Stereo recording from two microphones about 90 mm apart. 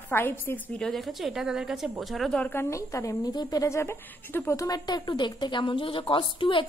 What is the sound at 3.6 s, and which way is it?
A woman's voice, 30° left (ahead or behind).